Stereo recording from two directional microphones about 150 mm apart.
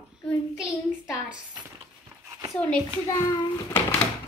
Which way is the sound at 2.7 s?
20° left (ahead or behind).